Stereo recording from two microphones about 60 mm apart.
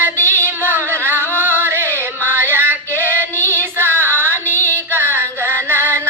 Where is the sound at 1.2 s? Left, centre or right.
Right.